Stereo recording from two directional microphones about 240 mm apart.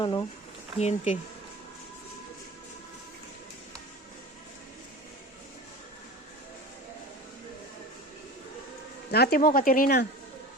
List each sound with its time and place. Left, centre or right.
0.0 s speech: centre
9.1 s speech: left